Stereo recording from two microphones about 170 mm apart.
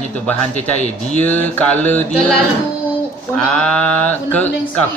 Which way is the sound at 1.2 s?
10° left (ahead or behind).